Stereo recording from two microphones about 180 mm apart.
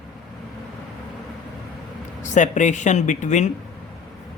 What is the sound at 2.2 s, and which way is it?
Speech, 45° left (ahead or behind).